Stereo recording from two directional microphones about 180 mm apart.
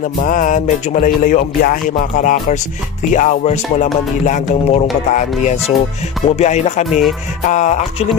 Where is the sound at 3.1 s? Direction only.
45° left (ahead or behind).